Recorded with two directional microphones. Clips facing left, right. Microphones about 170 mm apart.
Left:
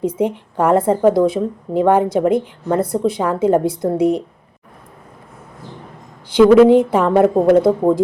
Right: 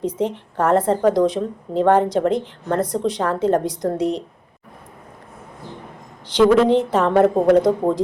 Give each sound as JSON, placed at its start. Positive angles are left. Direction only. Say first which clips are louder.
{"t": 0.0, "sound": "a woman's voice", "louder": "left 4 dB", "side_deg": 10}
{"t": 6.3, "sound": "a woman's voice", "louder": "left 5 dB", "side_deg": 10}